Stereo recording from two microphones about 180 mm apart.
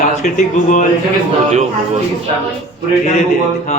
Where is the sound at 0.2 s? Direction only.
45° left (ahead or behind).